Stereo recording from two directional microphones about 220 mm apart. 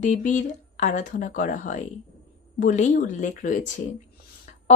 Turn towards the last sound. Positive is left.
turn(degrees=35)  # may be behind; listen again after turning